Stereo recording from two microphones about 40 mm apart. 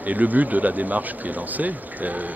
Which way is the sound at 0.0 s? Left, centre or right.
Right.